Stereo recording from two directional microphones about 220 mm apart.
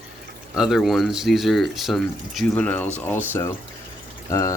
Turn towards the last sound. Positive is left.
turn(degrees=15)  # may be behind; listen again after turning